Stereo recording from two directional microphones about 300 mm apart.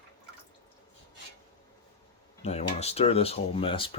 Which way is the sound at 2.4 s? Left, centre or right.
Left.